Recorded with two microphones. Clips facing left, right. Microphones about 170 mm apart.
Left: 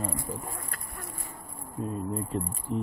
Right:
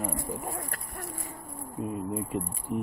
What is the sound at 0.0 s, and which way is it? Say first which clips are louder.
Speech: right 1 dB; 15° right (ahead or behind).